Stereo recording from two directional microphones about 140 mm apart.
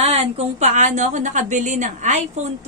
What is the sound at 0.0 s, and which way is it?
Speech, 45° right (ahead or behind).